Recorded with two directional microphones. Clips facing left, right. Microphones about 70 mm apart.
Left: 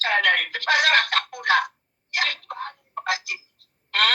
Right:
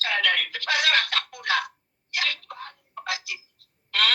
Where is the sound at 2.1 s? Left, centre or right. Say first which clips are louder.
Left 3 dB; left.